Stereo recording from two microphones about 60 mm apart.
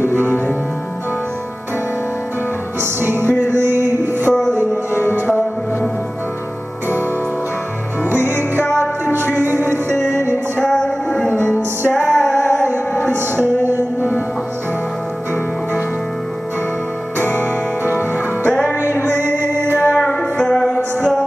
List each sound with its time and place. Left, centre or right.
2.8 s music: right
3.3 s music: left
3.6 s music: right
8.0 s music: right
10.6 s a sound: centre
11.9 s music: centre
12.7 s music: left
13.4 s music: right
18.4 s music: left
19.1 s music: right
19.8 s music: left
20.2 s music: centre